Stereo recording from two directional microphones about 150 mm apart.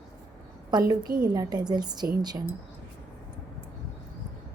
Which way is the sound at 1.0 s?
75° right (ahead or behind).